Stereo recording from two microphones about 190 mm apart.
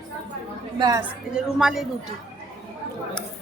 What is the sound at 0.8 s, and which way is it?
Speech, 20° right (ahead or behind).